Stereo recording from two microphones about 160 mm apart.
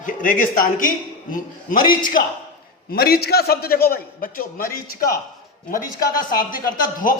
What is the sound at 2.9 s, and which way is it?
A man's voice, 75° left (ahead or behind).